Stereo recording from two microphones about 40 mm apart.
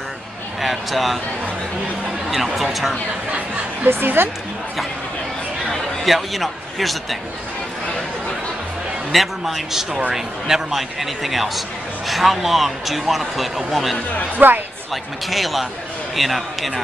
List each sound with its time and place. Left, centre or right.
0.6 s speech: centre
2.3 s speech: centre
3.8 s a woman's voice: right
6.0 s speech: centre
9.1 s a man's voice: centre
14.4 s speech: right
14.9 s speech: centre